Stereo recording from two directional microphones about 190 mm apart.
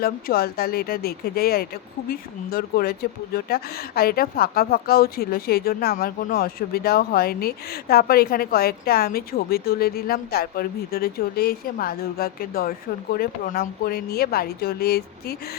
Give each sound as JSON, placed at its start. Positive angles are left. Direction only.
{"t": 0.0, "sound": "speech", "side_deg": 55}